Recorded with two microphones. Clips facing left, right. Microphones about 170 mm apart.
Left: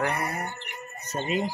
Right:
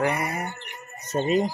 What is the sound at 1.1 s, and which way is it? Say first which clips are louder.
Speech: right 6 dB; 40° right (ahead or behind).